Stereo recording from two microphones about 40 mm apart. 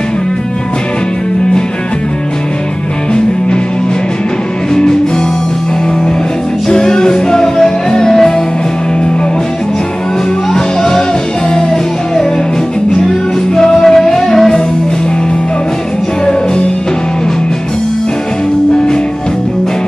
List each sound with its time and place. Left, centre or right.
4.7 s music: centre
6.7 s music: centre
10.5 s music: centre
13.6 s music: centre